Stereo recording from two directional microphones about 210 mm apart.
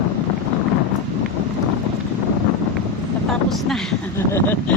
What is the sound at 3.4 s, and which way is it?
Speech, centre (ahead or behind).